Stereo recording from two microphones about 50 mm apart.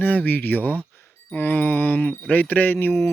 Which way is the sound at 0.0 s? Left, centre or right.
Left.